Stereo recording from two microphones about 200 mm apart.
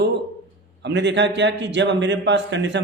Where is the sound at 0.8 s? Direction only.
60° right (ahead or behind).